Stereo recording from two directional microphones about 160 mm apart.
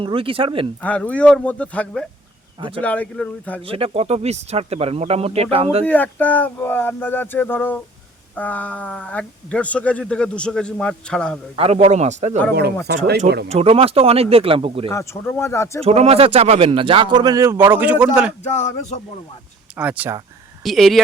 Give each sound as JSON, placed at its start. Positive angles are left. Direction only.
{"t": 0.0, "sound": "speech", "side_deg": -35}
{"t": 0.8, "sound": "speech", "side_deg": 10}
{"t": 2.6, "sound": "speech", "side_deg": -30}
{"t": 2.8, "sound": "speech", "side_deg": 10}
{"t": 3.7, "sound": "speech", "side_deg": -35}
{"t": 5.8, "sound": "speech", "side_deg": 10}
{"t": 11.5, "sound": "a man's voice", "side_deg": -40}
{"t": 13.5, "sound": "speech", "side_deg": -40}
{"t": 14.8, "sound": "speech", "side_deg": 15}
{"t": 15.8, "sound": "a man's voice", "side_deg": -40}
{"t": 18.4, "sound": "speech", "side_deg": 45}
{"t": 19.7, "sound": "speech", "side_deg": -10}